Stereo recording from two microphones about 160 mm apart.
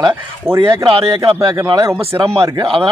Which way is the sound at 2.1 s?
35° right (ahead or behind).